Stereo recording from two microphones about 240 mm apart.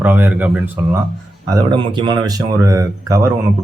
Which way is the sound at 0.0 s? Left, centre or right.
Centre.